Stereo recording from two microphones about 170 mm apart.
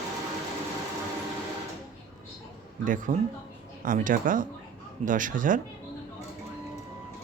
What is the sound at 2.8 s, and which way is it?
Speech, 50° right (ahead or behind).